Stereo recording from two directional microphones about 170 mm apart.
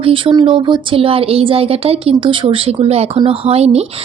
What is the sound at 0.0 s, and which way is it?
A woman's voice, 30° right (ahead or behind).